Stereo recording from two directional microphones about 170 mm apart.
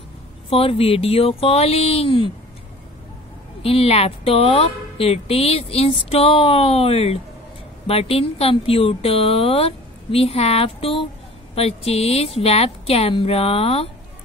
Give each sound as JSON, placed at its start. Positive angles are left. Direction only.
{"t": 0.5, "sound": "a woman's voice", "side_deg": 35}
{"t": 3.6, "sound": "a woman's voice", "side_deg": 35}